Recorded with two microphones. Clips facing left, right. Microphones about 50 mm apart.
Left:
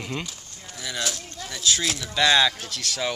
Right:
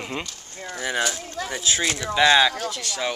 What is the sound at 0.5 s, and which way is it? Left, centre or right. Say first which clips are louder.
Speech: right 8 dB; right.